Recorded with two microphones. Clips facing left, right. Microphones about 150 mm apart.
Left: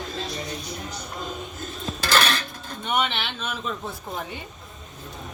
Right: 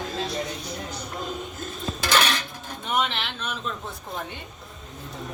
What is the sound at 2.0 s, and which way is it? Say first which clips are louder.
Dishes: left 1 dB; 15° right (ahead or behind).